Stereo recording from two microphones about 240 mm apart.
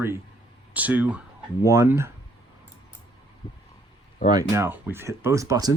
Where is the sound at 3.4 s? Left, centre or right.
Left.